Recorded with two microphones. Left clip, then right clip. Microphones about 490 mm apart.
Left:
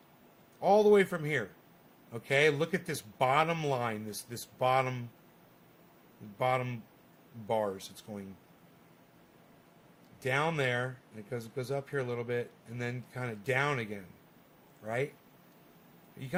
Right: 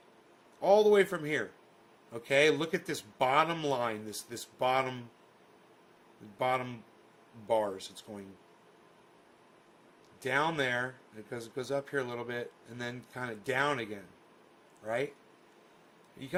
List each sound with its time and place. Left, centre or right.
0.6 s speech: centre
6.4 s speech: centre
10.2 s speech: centre